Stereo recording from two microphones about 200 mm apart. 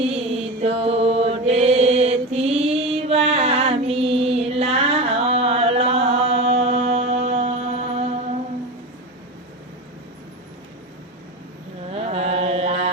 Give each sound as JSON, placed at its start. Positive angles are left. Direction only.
{"t": 0.0, "sound": "mantra", "side_deg": -30}
{"t": 11.9, "sound": "mantra", "side_deg": -30}